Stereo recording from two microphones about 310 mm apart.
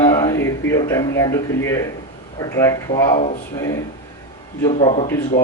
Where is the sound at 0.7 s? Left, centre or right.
Centre.